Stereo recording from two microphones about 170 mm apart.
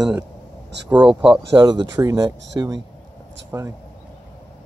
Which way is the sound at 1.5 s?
25° right (ahead or behind).